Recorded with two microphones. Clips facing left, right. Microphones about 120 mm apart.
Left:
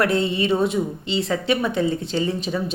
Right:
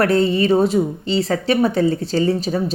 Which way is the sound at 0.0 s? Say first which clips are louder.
Right 5 dB; 40° right (ahead or behind).